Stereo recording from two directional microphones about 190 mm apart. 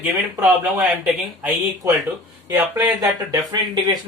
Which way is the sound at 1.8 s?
15° right (ahead or behind).